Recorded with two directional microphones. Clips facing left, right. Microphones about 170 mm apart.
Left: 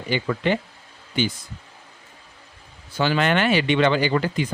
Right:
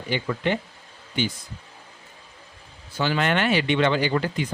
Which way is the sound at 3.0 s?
90° left.